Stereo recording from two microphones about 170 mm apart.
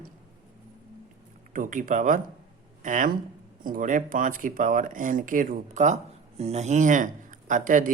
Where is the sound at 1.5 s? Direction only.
50° right (ahead or behind).